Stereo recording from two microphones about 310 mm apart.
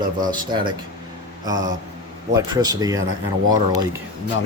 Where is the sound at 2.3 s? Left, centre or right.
Centre.